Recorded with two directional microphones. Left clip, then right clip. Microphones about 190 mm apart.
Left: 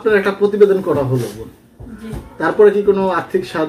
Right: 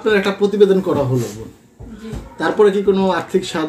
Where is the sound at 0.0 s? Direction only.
60° right (ahead or behind).